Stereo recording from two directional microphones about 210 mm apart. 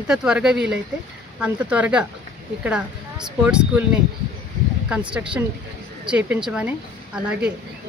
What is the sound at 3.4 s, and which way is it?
Speech, 5° right (ahead or behind).